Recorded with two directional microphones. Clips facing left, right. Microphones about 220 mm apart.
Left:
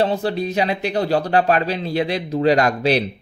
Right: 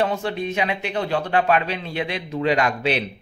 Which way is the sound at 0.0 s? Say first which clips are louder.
Left 3 dB; 35° left (ahead or behind).